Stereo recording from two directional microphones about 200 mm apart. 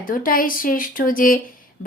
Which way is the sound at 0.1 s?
45° left (ahead or behind).